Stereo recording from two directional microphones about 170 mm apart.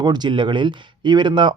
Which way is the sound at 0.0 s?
25° right (ahead or behind).